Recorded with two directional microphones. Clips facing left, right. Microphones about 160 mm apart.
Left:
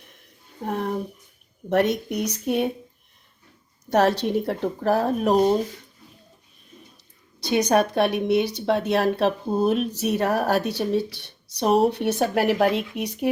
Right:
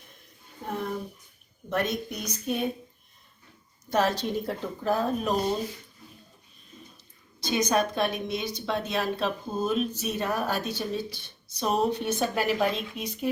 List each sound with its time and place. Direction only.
0.6 s a woman's voice: 70° left (ahead or behind)
3.8 s a woman's voice: 70° left (ahead or behind)
7.4 s a woman's voice: 65° left (ahead or behind)